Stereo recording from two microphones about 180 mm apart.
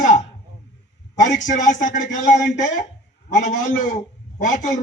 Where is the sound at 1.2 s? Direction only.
45° left (ahead or behind).